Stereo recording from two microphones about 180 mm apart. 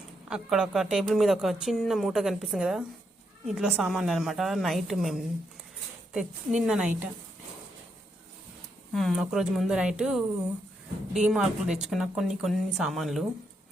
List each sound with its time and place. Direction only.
0.3 s speech: 5° right (ahead or behind)
8.9 s speech: centre (ahead or behind)